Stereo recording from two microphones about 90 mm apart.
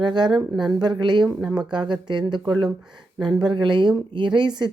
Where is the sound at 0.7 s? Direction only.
50° right (ahead or behind).